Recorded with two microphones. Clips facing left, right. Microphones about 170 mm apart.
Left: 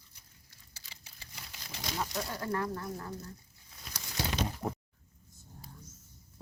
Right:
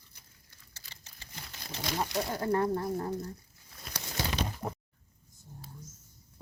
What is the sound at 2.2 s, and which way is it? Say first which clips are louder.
Speech: right 7 dB; 25° right (ahead or behind).